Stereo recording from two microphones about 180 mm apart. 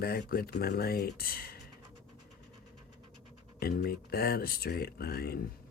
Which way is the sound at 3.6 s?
60° left (ahead or behind).